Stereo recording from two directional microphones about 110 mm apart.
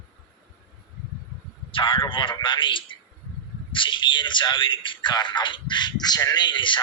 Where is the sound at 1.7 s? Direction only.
50° left (ahead or behind).